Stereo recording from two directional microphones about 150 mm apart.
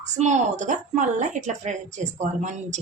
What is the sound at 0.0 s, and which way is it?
A woman's voice, 50° right (ahead or behind).